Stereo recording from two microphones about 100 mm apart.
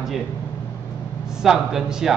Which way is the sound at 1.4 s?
5° right (ahead or behind).